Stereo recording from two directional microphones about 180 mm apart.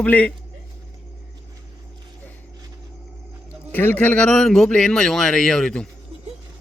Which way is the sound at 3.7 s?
10° left (ahead or behind).